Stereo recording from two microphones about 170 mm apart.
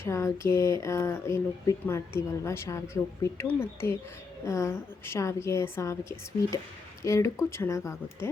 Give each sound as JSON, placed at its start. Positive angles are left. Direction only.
{"t": 0.0, "sound": "speech", "side_deg": 15}